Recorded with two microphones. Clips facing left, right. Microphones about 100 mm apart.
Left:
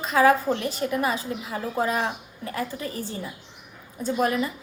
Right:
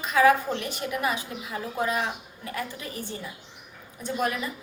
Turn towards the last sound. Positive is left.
turn(degrees=30)  # may be behind; listen again after turning